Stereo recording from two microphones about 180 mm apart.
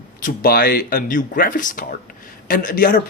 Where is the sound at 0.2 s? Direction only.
50° left (ahead or behind).